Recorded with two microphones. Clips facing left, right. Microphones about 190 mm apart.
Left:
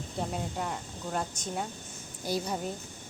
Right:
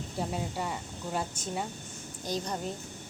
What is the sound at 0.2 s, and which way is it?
Speech, centre (ahead or behind).